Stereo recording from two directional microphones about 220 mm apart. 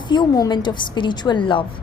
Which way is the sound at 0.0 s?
20° left (ahead or behind).